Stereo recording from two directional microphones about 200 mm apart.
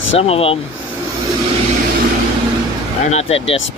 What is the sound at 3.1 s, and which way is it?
Speech, 30° left (ahead or behind).